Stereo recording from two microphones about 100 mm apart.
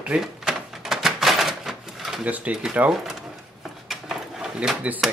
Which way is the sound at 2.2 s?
15° right (ahead or behind).